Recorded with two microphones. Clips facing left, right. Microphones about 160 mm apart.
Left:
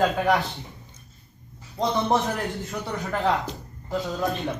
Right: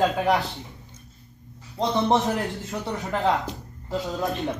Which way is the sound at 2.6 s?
20° right (ahead or behind).